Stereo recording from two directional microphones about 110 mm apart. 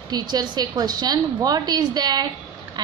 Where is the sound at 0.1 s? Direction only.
40° right (ahead or behind).